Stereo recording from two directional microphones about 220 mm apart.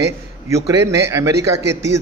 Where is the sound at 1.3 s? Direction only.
50° right (ahead or behind).